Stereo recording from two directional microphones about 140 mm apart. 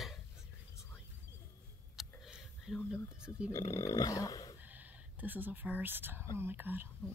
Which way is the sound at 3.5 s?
25° left (ahead or behind).